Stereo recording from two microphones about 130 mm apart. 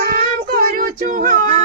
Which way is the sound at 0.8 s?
90° right.